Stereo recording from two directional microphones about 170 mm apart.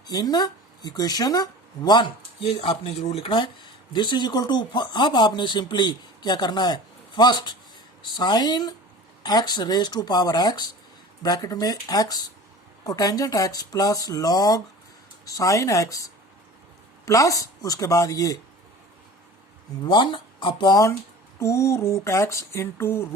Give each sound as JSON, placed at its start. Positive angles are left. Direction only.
{"t": 0.1, "sound": "speech", "side_deg": 25}
{"t": 19.8, "sound": "speech", "side_deg": 30}